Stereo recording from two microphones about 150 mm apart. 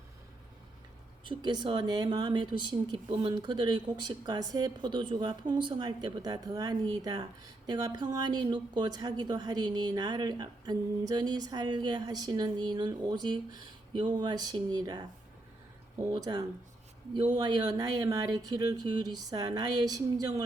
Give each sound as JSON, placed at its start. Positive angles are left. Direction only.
{"t": 1.3, "sound": "speech", "side_deg": -30}
{"t": 16.1, "sound": "speech", "side_deg": -25}